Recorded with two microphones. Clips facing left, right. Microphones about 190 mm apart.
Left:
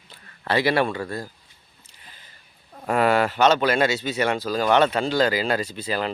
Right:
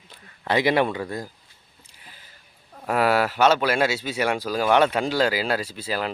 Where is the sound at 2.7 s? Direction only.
5° right (ahead or behind).